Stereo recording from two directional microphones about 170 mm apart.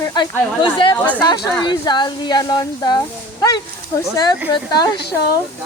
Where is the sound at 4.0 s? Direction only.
25° left (ahead or behind).